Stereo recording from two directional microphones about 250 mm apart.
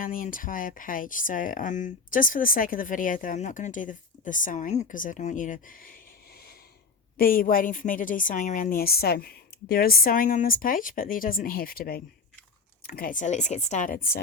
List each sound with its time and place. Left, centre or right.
0.0 s speech: left
7.2 s speech: left